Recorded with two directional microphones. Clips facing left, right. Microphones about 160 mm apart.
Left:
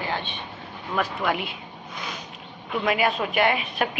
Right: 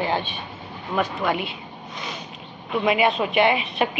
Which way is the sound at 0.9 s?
Centre (ahead or behind).